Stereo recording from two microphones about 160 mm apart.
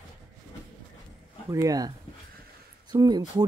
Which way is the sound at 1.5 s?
20° right (ahead or behind).